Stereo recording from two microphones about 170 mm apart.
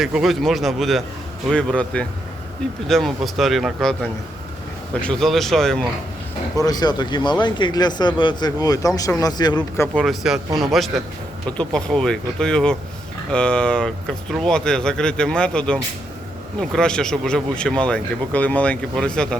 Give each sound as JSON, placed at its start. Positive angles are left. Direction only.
{"t": 0.0, "sound": "speech", "side_deg": 0}
{"t": 6.6, "sound": "speech", "side_deg": 25}
{"t": 10.0, "sound": "speech", "side_deg": 0}